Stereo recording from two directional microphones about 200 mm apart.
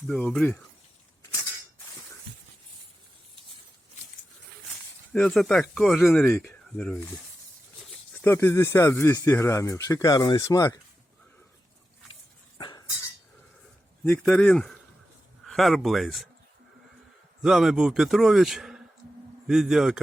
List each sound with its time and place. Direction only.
0.1 s speech: 5° left (ahead or behind)
5.1 s speech: 5° left (ahead or behind)
12.5 s chink: 20° left (ahead or behind)
14.0 s speech: 5° left (ahead or behind)
17.4 s speech: centre (ahead or behind)